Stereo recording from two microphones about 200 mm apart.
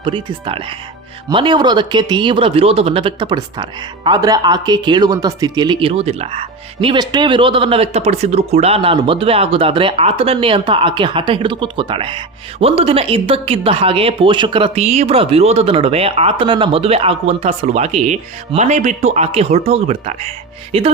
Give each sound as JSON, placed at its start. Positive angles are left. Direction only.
{"t": 0.0, "sound": "speech", "side_deg": -25}